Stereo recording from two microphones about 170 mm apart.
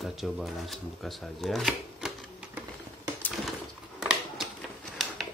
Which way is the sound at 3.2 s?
10° left (ahead or behind).